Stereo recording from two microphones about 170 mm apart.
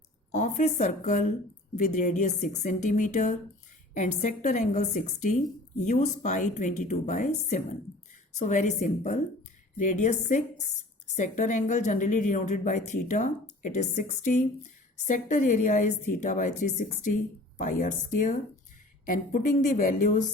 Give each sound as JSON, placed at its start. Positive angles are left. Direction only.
{"t": 0.3, "sound": "a woman's voice", "side_deg": 45}